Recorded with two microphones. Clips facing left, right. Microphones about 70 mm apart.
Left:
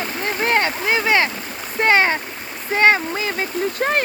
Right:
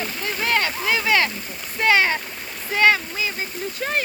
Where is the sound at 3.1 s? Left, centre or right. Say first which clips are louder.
Left 5 dB; left.